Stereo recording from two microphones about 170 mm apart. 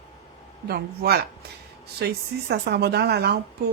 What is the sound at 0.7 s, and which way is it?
Speech, 70° right (ahead or behind).